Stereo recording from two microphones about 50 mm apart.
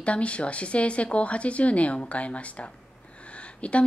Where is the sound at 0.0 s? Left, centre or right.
Left.